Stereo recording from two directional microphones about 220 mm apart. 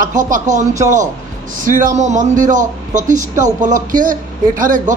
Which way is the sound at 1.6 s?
35° right (ahead or behind).